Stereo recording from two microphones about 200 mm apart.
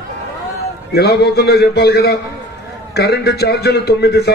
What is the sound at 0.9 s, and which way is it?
A man's voice, 50° left (ahead or behind).